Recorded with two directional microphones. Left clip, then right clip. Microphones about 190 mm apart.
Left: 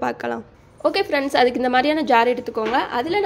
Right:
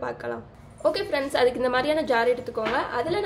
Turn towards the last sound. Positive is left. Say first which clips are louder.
# left 5 dB
turn(degrees=45)  # may be behind; listen again after turning